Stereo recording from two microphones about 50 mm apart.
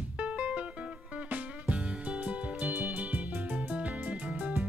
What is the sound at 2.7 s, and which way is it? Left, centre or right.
Music, right.